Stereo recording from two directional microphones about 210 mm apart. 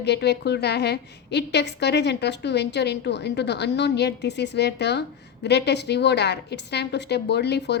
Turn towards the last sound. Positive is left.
turn(degrees=55)  # may be behind; listen again after turning